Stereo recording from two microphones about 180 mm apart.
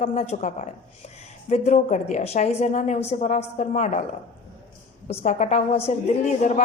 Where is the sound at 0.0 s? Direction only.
40° left (ahead or behind).